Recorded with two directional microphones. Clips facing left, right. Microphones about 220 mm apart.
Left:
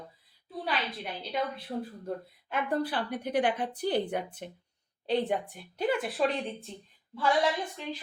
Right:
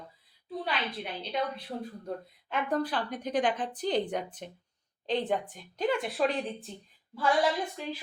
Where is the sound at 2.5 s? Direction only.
10° left (ahead or behind).